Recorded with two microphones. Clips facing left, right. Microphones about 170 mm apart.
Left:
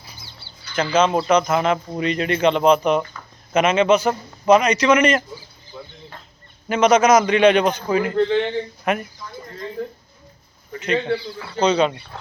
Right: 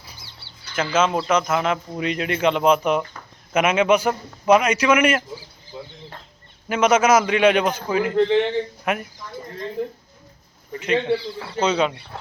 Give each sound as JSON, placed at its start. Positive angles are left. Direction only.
{"t": 0.8, "sound": "a man's voice", "side_deg": -5}
{"t": 5.7, "sound": "a sound", "side_deg": -15}
{"t": 6.7, "sound": "a man's voice", "side_deg": -5}
{"t": 8.1, "sound": "a man's voice", "side_deg": -15}
{"t": 8.9, "sound": "a man's voice", "side_deg": -5}
{"t": 10.8, "sound": "a man's voice", "side_deg": -5}